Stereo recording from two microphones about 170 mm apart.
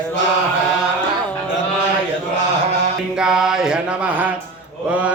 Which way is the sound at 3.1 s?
5° right (ahead or behind).